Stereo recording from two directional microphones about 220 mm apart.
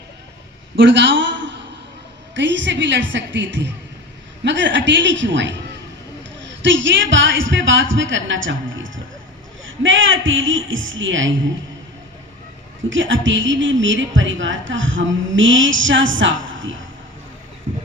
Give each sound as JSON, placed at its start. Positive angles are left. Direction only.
{"t": 0.8, "sound": "a man's voice", "side_deg": -55}
{"t": 6.6, "sound": "a woman's voice", "side_deg": -60}
{"t": 12.9, "sound": "a woman's voice", "side_deg": -60}